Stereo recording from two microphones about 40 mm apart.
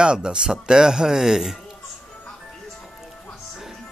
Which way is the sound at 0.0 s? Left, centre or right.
Right.